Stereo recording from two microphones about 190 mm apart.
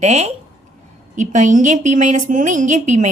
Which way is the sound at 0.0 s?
35° right (ahead or behind).